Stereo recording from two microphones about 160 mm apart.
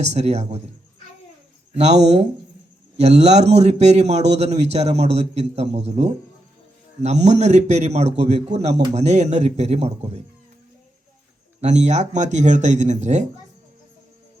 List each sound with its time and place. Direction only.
0.0 s a man's voice: 45° right (ahead or behind)
1.8 s a man's voice: 45° right (ahead or behind)
11.6 s a man's voice: 45° right (ahead or behind)